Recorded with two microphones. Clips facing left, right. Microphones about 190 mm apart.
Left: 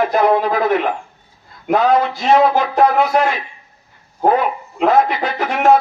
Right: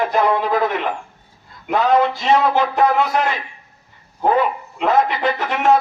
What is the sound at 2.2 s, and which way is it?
Speech, 45° left (ahead or behind).